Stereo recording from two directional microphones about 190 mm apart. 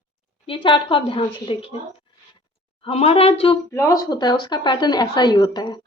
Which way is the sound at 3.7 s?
15° left (ahead or behind).